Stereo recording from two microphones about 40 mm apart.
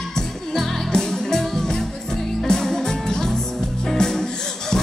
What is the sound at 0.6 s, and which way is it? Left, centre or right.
Music, centre.